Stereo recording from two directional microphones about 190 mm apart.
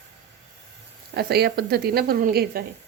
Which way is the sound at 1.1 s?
55° right (ahead or behind).